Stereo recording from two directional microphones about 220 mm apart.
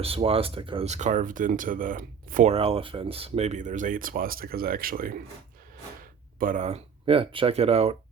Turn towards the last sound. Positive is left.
turn(degrees=-25)  # may be behind; listen again after turning